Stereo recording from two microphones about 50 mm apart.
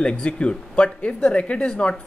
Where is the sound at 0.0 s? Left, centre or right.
Left.